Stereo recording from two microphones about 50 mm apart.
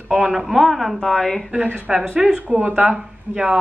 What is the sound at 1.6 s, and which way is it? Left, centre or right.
Speech, right.